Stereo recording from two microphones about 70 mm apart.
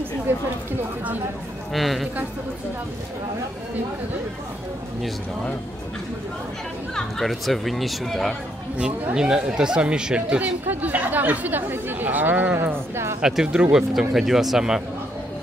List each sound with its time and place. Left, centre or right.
0.3 s speech: right
1.7 s speech: centre
7.0 s speech: centre
9.1 s speech: centre
12.9 s speech: right
13.2 s speech: centre